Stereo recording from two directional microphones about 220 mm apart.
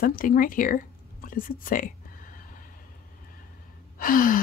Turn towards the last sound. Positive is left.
turn(degrees=40)  # may be behind; listen again after turning